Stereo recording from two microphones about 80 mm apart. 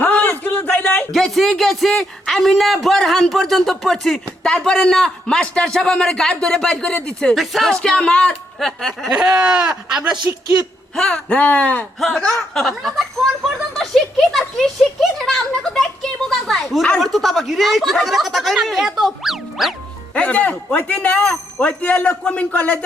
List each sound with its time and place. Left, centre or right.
0.0 s a sound: left
1.1 s a man's voice: centre
7.3 s a man's voice: centre
7.7 s a man's voice: centre
9.1 s speech: centre
10.9 s a man's voice: centre
11.3 s speech: left
11.9 s a man's voice: centre
20.1 s a man's voice: centre